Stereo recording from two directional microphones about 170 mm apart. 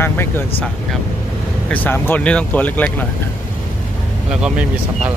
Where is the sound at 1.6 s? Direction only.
10° left (ahead or behind).